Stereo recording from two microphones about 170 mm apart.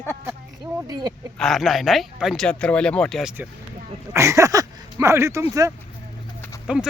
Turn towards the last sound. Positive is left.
turn(degrees=-5)  # may be behind; listen again after turning